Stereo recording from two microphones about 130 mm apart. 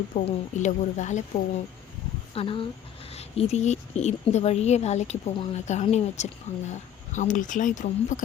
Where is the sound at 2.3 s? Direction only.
45° left (ahead or behind).